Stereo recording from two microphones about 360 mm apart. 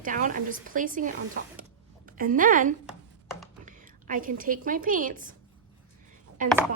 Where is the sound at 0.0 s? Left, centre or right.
Right.